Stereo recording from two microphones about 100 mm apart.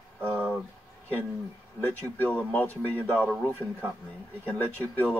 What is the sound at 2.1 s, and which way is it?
Speech, 15° left (ahead or behind).